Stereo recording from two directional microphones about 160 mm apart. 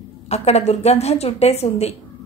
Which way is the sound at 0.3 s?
40° left (ahead or behind).